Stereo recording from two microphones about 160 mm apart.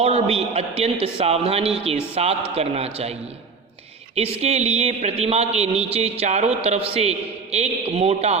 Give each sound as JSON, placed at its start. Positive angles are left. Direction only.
{"t": 0.0, "sound": "a man's voice", "side_deg": -35}